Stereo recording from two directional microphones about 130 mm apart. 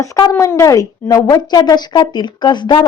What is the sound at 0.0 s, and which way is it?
A woman's voice, 25° left (ahead or behind).